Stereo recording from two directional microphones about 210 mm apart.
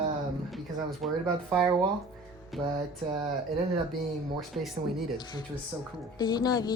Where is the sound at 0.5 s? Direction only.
Centre (ahead or behind).